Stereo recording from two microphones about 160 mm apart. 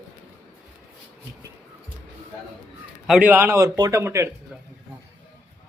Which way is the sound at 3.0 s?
5° right (ahead or behind).